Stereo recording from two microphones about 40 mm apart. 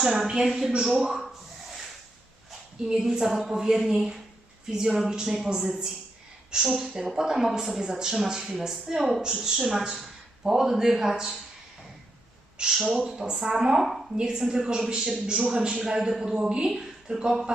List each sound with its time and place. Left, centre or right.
0.0 s a man's voice: centre
1.2 s rub: centre
2.9 s a man's voice: centre
4.6 s a man's voice: centre
12.7 s a woman's voice: centre
13.0 s a man's voice: centre